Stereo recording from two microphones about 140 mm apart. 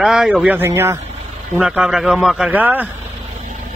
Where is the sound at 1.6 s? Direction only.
5° right (ahead or behind).